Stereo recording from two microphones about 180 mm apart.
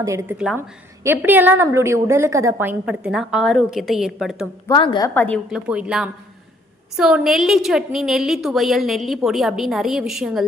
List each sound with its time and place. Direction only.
0.0 s a woman's voice: 15° right (ahead or behind)
4.7 s a woman's voice: 25° left (ahead or behind)
5.1 s a woman's voice: 10° left (ahead or behind)
5.5 s a woman's voice: 5° right (ahead or behind)